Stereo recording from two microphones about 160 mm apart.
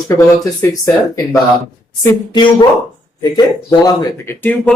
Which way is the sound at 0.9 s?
20° left (ahead or behind).